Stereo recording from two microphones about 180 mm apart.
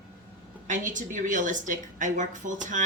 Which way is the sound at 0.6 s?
45° right (ahead or behind).